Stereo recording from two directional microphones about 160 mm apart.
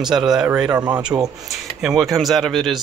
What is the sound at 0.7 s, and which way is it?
Speech, 25° right (ahead or behind).